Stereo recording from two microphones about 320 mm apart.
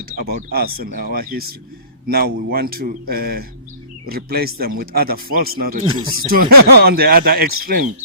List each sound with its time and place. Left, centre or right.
0.2 s speech: right
5.8 s speech: centre
6.2 s speech: right